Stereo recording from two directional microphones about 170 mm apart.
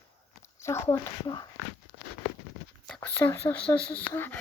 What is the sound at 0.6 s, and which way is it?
Speech, 15° left (ahead or behind).